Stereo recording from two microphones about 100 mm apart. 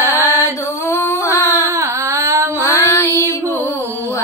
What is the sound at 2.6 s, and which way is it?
Female singing, 25° left (ahead or behind).